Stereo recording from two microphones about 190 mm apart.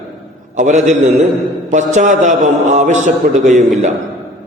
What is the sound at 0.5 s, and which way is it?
A man's voice, 40° right (ahead or behind).